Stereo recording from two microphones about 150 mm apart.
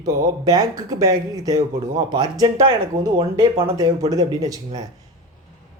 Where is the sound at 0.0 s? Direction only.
25° right (ahead or behind).